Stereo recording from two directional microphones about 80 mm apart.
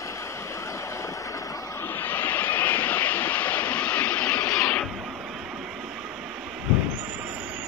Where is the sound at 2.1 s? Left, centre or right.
Left.